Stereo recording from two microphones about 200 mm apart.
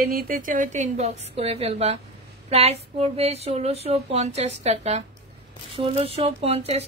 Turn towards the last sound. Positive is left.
turn(degrees=-30)  # may be behind; listen again after turning